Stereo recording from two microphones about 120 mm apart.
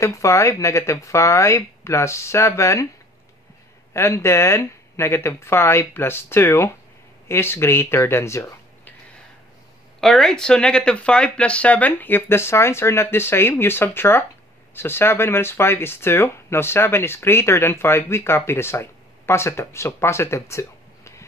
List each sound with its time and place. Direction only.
0.0 s speech: 25° left (ahead or behind)
3.9 s speech: 25° left (ahead or behind)
9.9 s speech: 5° left (ahead or behind); by 21.3 s 25° left (ahead or behind)